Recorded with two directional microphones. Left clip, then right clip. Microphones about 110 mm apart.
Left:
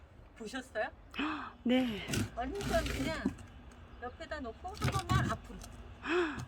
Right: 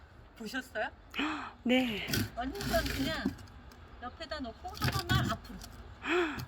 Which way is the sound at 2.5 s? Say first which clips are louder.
Right 1 dB; 35° right (ahead or behind).